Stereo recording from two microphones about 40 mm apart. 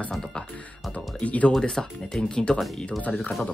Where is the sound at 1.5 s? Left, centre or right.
Centre.